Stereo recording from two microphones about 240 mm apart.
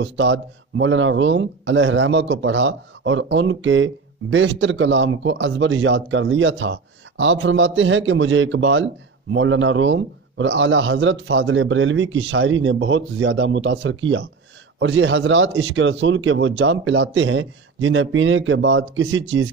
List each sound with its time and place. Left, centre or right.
0.0 s speech: right